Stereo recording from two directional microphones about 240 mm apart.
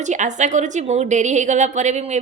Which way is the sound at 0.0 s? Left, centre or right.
Right.